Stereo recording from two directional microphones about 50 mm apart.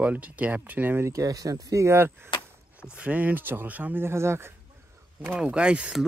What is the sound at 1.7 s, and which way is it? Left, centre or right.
Speech, right.